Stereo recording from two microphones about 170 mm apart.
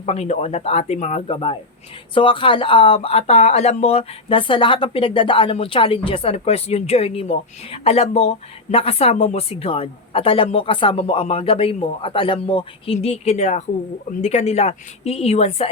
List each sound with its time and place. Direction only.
0.0 s speech: 40° left (ahead or behind)